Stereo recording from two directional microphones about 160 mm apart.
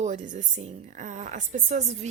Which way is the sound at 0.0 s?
50° right (ahead or behind).